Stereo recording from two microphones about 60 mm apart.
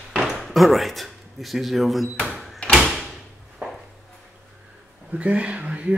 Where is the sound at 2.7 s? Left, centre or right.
Centre.